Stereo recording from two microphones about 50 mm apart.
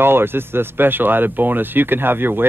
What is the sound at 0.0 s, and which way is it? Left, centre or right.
Speech, right.